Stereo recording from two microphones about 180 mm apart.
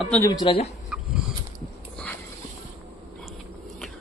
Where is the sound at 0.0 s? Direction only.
5° left (ahead or behind).